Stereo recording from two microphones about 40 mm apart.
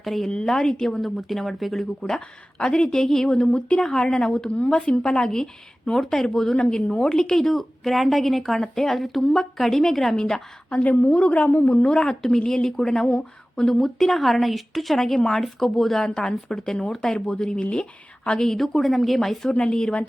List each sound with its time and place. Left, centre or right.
0.0 s a woman's voice: centre
0.6 s speech: centre
2.0 s a woman's voice: centre
10.2 s speech: centre
11.0 s a woman's voice: left
11.9 s speech: left
12.6 s a woman's voice: centre
16.0 s a woman's voice: centre
19.5 s speech: left